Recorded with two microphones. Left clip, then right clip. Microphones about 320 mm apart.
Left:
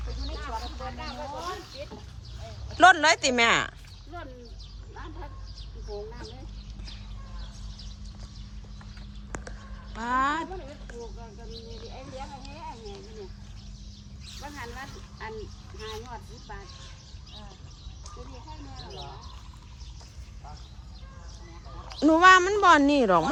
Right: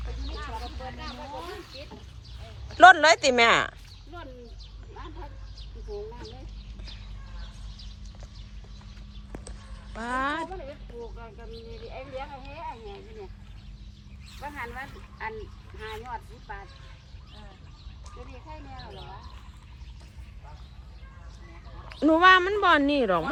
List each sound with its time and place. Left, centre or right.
2.6 s speech: centre
9.9 s speech: centre
11.9 s speech: centre
14.4 s speech: centre
22.0 s speech: centre